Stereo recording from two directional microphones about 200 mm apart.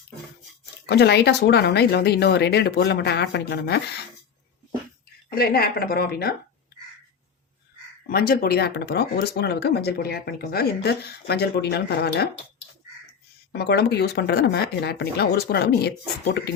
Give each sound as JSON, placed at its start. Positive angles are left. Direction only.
{"t": 0.9, "sound": "speech", "side_deg": 55}
{"t": 5.3, "sound": "speech", "side_deg": 50}
{"t": 8.1, "sound": "speech", "side_deg": 50}
{"t": 13.5, "sound": "speech", "side_deg": 55}